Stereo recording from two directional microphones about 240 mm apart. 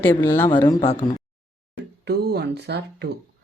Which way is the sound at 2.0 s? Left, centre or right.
Right.